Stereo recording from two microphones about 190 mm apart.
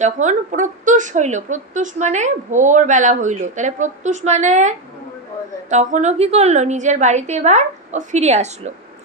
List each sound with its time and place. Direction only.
0.0 s a woman's voice: 40° right (ahead or behind)